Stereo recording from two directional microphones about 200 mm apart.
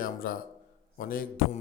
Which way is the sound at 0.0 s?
45° left (ahead or behind).